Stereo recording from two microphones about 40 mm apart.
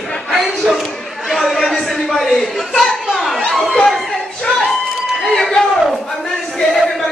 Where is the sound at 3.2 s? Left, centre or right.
Centre.